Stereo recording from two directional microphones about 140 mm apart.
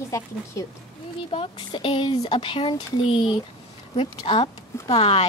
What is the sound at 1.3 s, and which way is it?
Speech, 40° left (ahead or behind).